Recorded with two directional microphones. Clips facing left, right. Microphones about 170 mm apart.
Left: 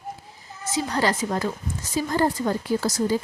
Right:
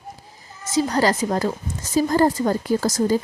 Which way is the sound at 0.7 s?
40° right (ahead or behind).